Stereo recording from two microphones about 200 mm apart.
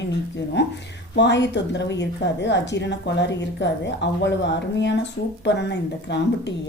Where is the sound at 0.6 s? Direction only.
60° left (ahead or behind).